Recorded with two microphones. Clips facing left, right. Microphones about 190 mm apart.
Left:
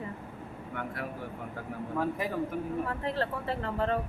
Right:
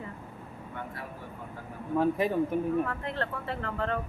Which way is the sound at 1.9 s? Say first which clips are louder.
Right 6 dB; 20° right (ahead or behind).